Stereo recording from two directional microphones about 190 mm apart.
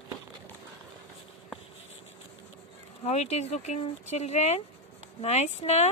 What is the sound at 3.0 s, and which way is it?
Speech, 35° left (ahead or behind).